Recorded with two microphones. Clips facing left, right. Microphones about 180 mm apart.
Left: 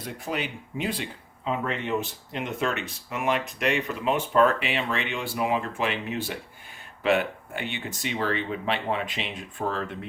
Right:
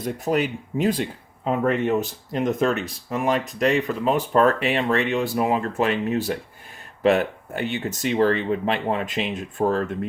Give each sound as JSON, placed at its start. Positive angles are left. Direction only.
{"t": 0.0, "sound": "speech", "side_deg": -45}